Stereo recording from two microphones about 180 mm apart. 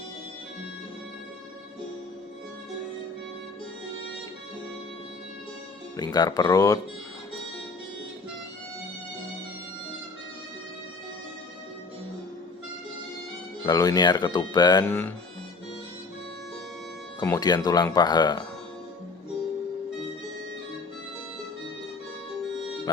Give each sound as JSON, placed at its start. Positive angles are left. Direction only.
{"t": 6.0, "sound": "speech", "side_deg": 20}
{"t": 13.7, "sound": "speech", "side_deg": 20}
{"t": 14.8, "sound": "speech", "side_deg": 10}
{"t": 17.2, "sound": "speech", "side_deg": 20}